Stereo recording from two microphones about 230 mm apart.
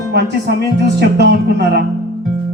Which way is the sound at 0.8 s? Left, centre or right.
Right.